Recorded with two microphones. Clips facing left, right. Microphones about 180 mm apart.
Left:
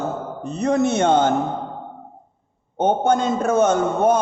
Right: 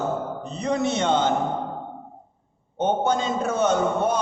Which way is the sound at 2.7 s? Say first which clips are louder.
Left 4 dB; 50° left (ahead or behind).